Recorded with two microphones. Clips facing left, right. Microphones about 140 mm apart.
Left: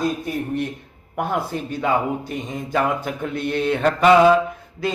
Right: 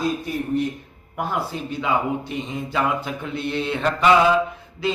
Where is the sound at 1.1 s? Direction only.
50° left (ahead or behind).